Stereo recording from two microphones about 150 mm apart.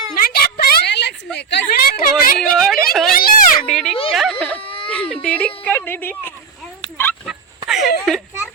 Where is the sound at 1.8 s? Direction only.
80° left.